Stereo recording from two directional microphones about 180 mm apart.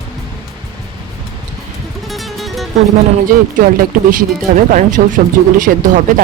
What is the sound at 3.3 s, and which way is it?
Speech, 50° right (ahead or behind).